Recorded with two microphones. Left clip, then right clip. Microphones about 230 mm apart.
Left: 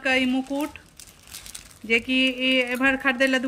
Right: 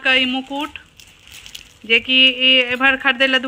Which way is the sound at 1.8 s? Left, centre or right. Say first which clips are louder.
Right 9 dB; centre.